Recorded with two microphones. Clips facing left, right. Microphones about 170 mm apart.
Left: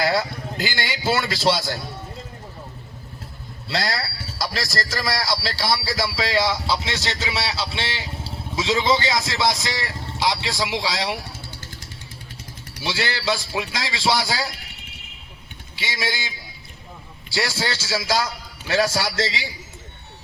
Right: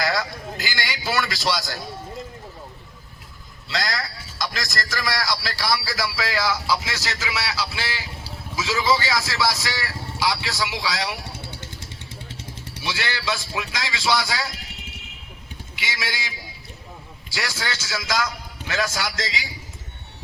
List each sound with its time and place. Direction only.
0.0 s a man's voice: 30° left (ahead or behind)
3.7 s a man's voice: 30° left (ahead or behind)
12.3 s vehicle: 30° right (ahead or behind)
12.8 s a man's voice: 30° left (ahead or behind)
15.7 s speech: 30° left (ahead or behind)
17.3 s a man's voice: 30° left (ahead or behind)